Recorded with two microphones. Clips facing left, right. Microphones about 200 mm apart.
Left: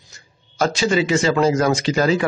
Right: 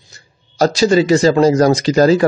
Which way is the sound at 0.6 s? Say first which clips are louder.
Right 6 dB; 35° right (ahead or behind).